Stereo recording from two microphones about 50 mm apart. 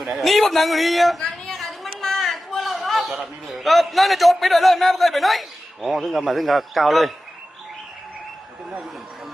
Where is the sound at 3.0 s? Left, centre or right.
Right.